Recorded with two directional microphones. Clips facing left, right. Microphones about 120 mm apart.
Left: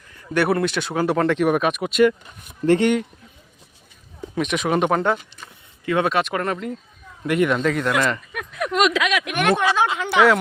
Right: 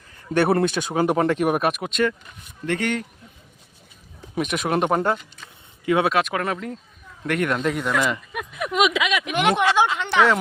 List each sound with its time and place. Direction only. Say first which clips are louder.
0.1 s speech: right 1 dB; 30° right (ahead or behind); by 2.1 s 10° left (ahead or behind)
2.6 s speech: left 8 dB; 25° left (ahead or behind)
4.4 s speech: left 2 dB; 5° right (ahead or behind)
5.8 s speech: right 1 dB; 15° right (ahead or behind)
6.1 s speech: even; centre (ahead or behind)
9.3 s speech: right 1 dB; 20° right (ahead or behind)
9.9 s speech: left 2 dB; 5° left (ahead or behind)